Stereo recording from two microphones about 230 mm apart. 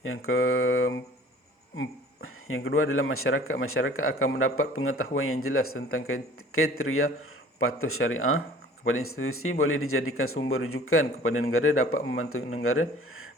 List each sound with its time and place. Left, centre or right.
0.0 s speech: left
2.9 s speech: left